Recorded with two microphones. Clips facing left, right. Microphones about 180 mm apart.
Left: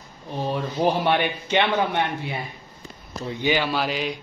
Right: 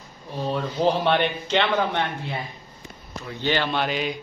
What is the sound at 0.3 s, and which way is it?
A man's voice, 15° left (ahead or behind).